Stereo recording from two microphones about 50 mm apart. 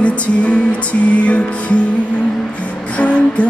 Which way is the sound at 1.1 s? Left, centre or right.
Left.